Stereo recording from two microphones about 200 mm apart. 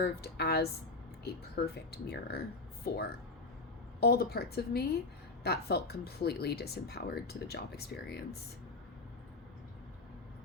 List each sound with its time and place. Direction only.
0.0 s a woman's voice: 55° left (ahead or behind)